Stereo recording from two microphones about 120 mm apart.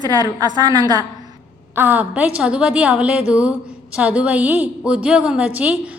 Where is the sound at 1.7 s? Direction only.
15° right (ahead or behind).